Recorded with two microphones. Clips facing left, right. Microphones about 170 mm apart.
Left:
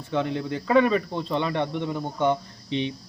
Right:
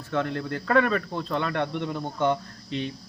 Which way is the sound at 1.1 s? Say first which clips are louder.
Left 2 dB; 20° left (ahead or behind).